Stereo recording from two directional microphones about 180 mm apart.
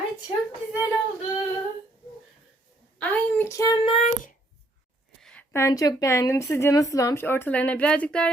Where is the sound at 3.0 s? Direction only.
10° left (ahead or behind); by 4.1 s 30° left (ahead or behind).